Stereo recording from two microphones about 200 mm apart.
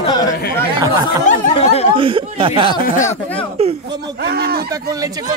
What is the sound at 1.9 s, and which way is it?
Speech, 25° right (ahead or behind).